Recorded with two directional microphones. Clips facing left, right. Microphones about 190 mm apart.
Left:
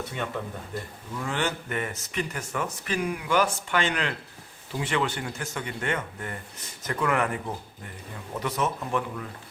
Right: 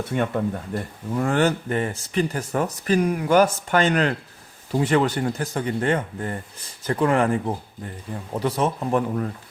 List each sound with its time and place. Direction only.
0.1 s speech: 50° right (ahead or behind)